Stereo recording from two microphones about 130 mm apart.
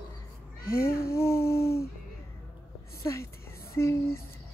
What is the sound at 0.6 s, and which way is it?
Speech, 20° left (ahead or behind).